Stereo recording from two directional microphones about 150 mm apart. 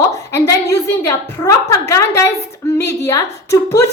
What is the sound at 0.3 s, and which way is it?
A woman's voice, 20° left (ahead or behind).